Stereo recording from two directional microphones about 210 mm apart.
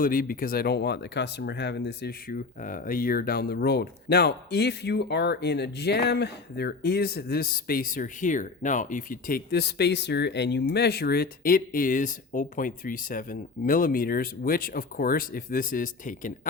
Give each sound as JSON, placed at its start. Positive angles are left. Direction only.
{"t": 0.0, "sound": "speech", "side_deg": 40}